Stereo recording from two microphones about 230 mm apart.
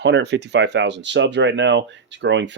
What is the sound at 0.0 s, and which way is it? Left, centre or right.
Speech, right.